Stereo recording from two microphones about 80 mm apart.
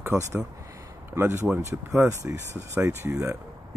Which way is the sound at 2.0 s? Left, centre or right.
Right.